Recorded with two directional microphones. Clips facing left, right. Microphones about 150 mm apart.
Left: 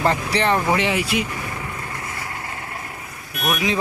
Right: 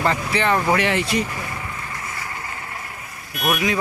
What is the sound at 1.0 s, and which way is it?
Speech, centre (ahead or behind).